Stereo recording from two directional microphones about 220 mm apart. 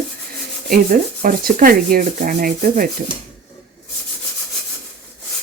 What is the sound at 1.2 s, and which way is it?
Rub, 40° right (ahead or behind).